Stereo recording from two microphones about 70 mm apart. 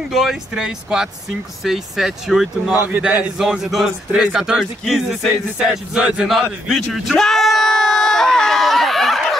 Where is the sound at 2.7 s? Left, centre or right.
Right.